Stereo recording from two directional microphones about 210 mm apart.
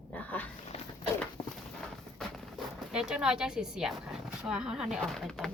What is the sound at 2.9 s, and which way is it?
A woman's voice, 5° right (ahead or behind).